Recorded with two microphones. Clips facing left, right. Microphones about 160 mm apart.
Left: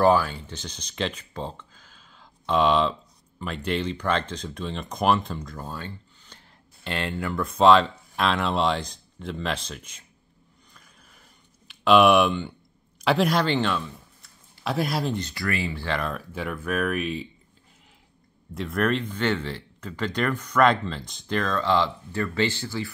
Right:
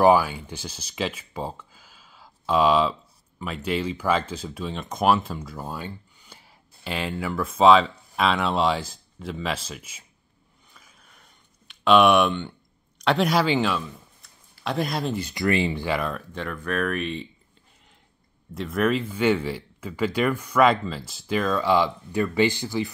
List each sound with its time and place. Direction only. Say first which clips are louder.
0.0 s speech: right 2 dB; 10° right (ahead or behind)
10.7 s a sound: right 1 dB; centre (ahead or behind)
13.0 s speech: right 1 dB; centre (ahead or behind)
15.2 s speech: right 6 dB; 20° right (ahead or behind)
16.0 s speech: right 1 dB; centre (ahead or behind)
18.5 s speech: right 1 dB; centre (ahead or behind)